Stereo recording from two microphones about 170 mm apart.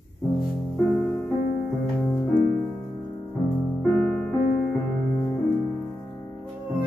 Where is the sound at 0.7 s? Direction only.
10° left (ahead or behind).